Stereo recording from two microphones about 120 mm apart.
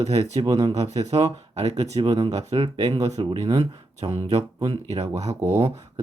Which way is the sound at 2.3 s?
65° right (ahead or behind).